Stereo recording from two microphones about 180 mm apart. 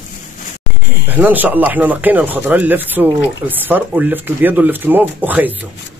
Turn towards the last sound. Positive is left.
turn(degrees=-10)  # may be behind; listen again after turning